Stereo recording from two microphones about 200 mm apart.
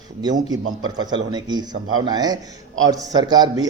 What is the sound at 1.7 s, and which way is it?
Speech, 90° right.